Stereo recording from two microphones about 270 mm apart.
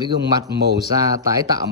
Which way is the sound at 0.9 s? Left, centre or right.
Centre.